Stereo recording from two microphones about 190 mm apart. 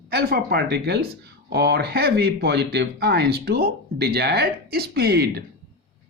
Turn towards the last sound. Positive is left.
turn(degrees=-55)  # may be behind; listen again after turning